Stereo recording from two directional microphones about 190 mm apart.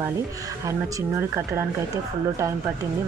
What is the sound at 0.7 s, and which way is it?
Speech, 15° right (ahead or behind).